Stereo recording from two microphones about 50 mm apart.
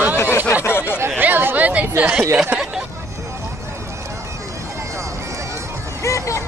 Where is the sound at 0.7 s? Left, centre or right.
Left.